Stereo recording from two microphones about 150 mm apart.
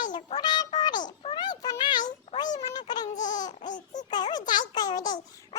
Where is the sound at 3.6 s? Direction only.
55° left (ahead or behind).